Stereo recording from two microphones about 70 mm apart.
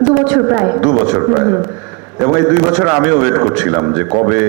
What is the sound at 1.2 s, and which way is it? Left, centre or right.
A man's voice, right.